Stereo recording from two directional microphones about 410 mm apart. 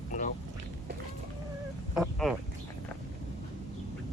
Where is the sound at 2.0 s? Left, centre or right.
Centre.